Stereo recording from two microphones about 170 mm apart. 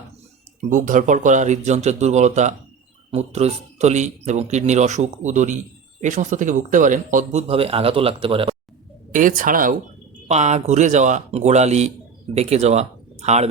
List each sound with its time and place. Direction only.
0.6 s speech: 50° right (ahead or behind)
7.4 s speech: 35° right (ahead or behind)
9.1 s speech: 50° right (ahead or behind)
10.2 s speech: 40° right (ahead or behind)